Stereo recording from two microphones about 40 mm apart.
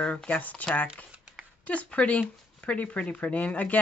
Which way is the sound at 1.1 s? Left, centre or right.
Right.